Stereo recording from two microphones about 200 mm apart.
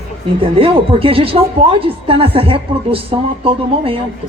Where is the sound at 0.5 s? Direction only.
25° right (ahead or behind).